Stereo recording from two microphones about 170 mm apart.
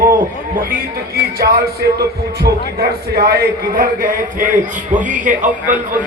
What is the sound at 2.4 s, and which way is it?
A man's voice, 70° right (ahead or behind).